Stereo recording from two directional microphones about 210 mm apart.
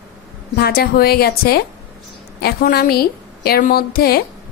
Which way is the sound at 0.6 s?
50° left (ahead or behind).